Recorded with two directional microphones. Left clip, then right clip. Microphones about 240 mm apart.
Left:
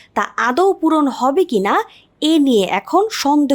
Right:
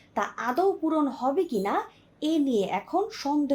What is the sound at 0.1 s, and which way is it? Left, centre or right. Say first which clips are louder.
Speech: left 11 dB; left.